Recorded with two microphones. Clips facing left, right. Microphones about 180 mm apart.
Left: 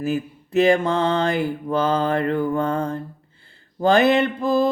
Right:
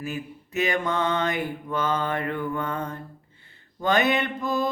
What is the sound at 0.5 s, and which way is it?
Mantra, 30° left (ahead or behind).